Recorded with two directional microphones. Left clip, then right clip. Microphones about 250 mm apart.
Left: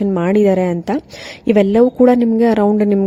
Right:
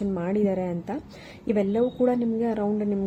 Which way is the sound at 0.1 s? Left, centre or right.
Left.